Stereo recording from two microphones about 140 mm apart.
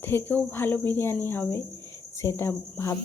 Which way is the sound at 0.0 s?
15° left (ahead or behind).